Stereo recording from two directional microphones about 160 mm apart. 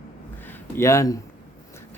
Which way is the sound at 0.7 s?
20° left (ahead or behind).